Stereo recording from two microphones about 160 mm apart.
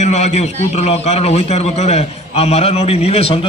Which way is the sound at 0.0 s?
45° left (ahead or behind).